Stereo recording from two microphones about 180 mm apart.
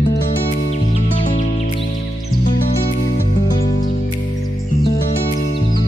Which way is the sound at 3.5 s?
20° left (ahead or behind).